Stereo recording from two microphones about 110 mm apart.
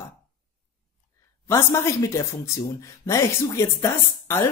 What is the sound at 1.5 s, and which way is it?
Speech, 25° left (ahead or behind).